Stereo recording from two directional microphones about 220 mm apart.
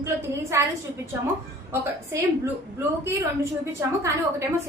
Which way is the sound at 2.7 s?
10° right (ahead or behind).